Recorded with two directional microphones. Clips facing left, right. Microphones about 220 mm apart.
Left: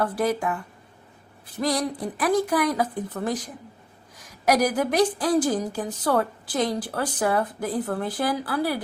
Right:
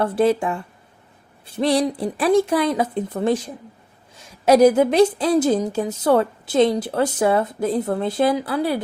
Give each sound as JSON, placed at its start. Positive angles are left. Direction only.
{"t": 0.0, "sound": "a woman's voice", "side_deg": -25}